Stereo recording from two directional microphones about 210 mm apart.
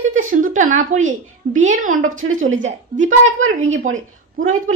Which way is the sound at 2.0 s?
70° right (ahead or behind).